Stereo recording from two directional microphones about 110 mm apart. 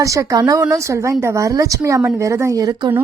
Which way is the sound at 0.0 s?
30° right (ahead or behind).